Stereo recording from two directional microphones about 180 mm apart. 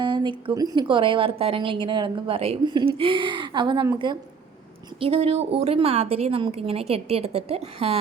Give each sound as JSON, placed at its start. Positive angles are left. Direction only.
{"t": 0.0, "sound": "a woman's voice", "side_deg": -25}